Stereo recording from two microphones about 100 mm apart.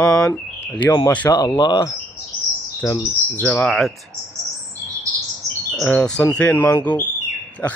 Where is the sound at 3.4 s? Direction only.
15° left (ahead or behind).